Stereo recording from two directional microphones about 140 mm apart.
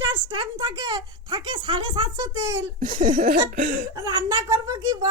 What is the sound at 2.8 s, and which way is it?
Laughter, 75° right (ahead or behind).